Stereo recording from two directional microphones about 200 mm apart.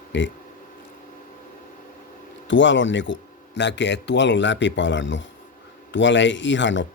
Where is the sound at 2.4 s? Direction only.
65° left (ahead or behind).